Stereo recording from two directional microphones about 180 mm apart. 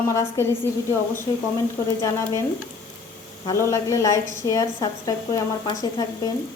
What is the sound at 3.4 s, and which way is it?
A woman's voice, 15° left (ahead or behind).